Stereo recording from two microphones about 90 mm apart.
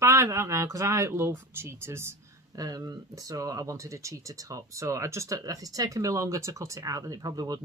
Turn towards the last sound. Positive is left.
turn(degrees=-45)  # may be behind; listen again after turning